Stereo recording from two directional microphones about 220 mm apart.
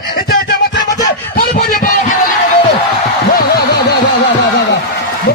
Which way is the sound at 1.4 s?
40° left (ahead or behind).